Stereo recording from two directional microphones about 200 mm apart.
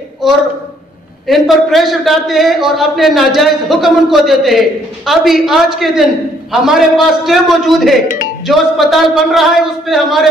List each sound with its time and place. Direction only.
1.2 s a man's voice: centre (ahead or behind)